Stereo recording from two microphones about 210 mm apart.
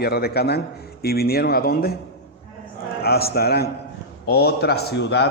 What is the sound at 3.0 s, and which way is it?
A man's voice, 50° left (ahead or behind).